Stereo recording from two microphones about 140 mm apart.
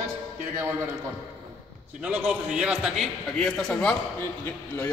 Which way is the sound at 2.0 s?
10° right (ahead or behind).